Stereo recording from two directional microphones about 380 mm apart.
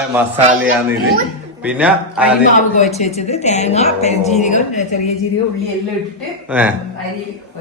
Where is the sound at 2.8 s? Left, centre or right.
Centre.